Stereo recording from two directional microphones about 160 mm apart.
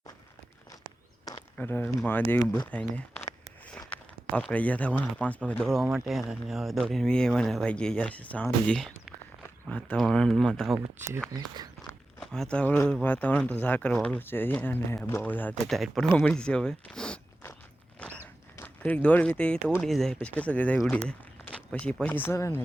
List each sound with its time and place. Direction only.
1.5 s speech: 15° left (ahead or behind)
11.3 s speech: 25° right (ahead or behind)
12.2 s speech: 5° left (ahead or behind)
18.0 s a sound: 5° left (ahead or behind)
18.5 s speech: 10° left (ahead or behind)
21.1 s a sound: 5° left (ahead or behind)
22.0 s speech: 10° left (ahead or behind)